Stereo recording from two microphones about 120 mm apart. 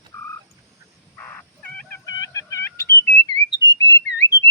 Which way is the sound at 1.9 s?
30° left (ahead or behind).